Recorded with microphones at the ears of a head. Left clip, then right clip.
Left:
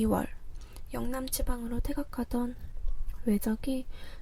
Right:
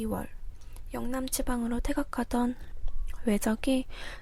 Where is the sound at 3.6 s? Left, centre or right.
Right.